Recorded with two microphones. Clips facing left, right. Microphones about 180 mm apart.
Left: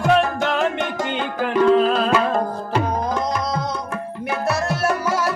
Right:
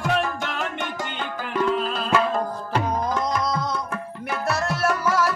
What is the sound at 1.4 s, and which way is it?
Music, 80° left.